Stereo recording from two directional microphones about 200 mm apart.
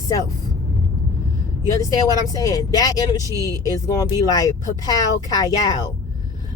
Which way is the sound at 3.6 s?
20° left (ahead or behind).